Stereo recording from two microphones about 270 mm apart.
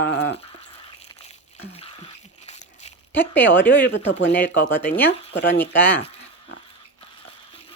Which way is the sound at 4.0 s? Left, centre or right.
Left.